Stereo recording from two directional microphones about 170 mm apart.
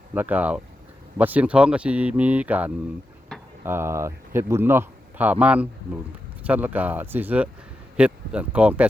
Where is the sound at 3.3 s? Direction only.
Centre (ahead or behind).